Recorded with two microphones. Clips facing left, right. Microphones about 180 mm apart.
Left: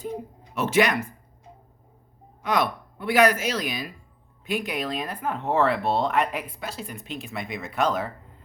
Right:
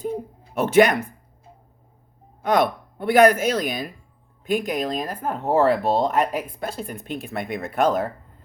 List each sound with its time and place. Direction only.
0.5 s speech: 50° right (ahead or behind)
2.4 s speech: 50° right (ahead or behind)